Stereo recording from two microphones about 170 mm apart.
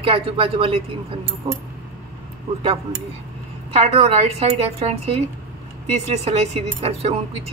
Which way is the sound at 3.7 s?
35° right (ahead or behind).